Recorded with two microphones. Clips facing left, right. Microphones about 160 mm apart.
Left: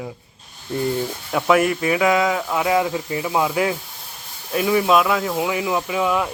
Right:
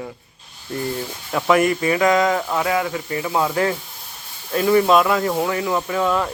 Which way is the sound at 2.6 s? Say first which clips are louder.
Left 2 dB; 15° left (ahead or behind).